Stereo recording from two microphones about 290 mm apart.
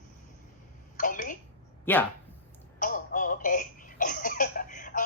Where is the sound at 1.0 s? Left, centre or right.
Left.